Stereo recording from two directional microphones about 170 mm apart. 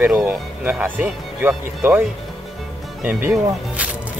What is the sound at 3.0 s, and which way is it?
Speech, 10° right (ahead or behind).